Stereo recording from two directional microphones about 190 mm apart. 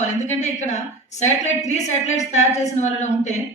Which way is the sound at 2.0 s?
35° left (ahead or behind).